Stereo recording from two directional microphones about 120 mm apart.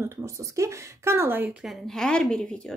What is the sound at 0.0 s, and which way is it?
Speech, 25° right (ahead or behind).